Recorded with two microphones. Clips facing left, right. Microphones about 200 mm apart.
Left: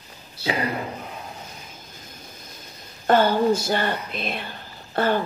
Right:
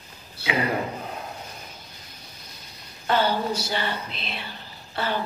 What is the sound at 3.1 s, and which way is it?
Speech, 50° left (ahead or behind).